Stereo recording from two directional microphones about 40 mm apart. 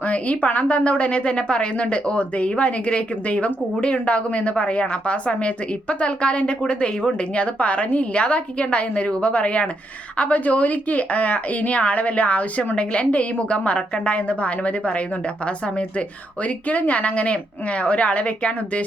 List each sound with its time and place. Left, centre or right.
0.0 s a woman's voice: left